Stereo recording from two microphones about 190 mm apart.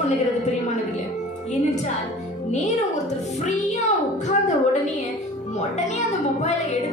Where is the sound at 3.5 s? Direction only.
35° left (ahead or behind).